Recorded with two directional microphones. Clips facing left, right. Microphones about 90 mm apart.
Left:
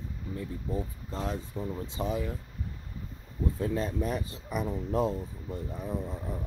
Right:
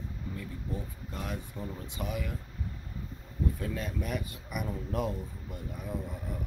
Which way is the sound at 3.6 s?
30° left (ahead or behind).